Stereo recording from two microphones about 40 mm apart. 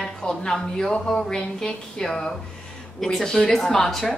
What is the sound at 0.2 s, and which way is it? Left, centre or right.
A woman's voice, centre.